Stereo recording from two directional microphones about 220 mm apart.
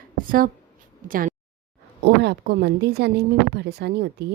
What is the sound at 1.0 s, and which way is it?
Speech, 40° right (ahead or behind).